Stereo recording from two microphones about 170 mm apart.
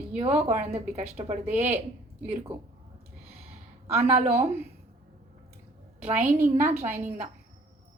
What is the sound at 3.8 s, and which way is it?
Speech, 35° right (ahead or behind).